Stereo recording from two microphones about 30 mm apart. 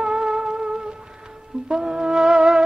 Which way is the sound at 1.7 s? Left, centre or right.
Right.